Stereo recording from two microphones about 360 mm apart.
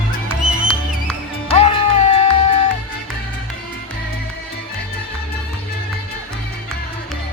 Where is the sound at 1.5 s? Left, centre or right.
Centre.